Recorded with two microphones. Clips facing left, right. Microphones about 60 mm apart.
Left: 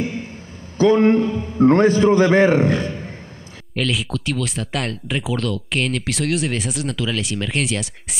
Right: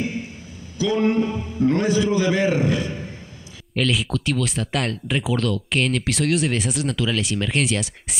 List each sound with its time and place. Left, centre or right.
0.7 s a man's voice: left
3.7 s speech: centre